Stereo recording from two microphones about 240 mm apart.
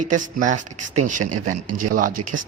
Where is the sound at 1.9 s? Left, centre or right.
Right.